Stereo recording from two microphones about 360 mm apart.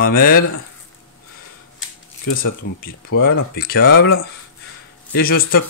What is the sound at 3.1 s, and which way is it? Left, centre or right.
Speech, left.